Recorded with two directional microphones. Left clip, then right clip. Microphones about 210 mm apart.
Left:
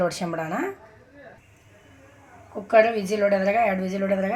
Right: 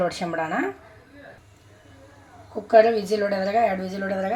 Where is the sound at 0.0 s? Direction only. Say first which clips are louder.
Right 1 dB; 5° left (ahead or behind).